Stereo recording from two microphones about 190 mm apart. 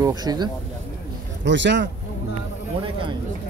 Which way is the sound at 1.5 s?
70° right (ahead or behind).